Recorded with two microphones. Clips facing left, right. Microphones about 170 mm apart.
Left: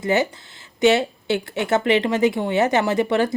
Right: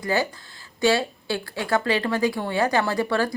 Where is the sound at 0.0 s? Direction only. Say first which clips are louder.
Left 4 dB; 20° left (ahead or behind).